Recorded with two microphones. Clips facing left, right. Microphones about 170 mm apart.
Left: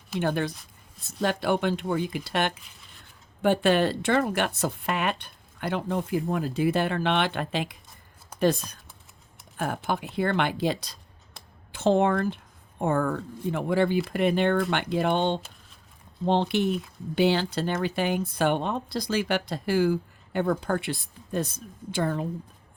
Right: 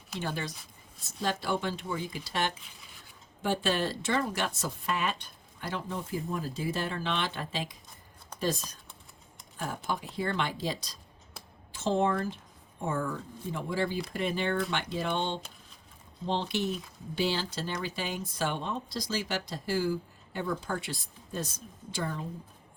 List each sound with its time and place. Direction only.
0.2 s a woman's voice: 60° left (ahead or behind)